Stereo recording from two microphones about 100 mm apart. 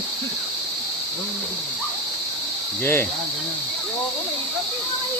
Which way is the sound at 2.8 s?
25° left (ahead or behind).